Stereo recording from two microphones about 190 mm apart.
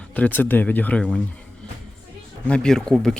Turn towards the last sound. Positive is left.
turn(degrees=5)  # may be behind; listen again after turning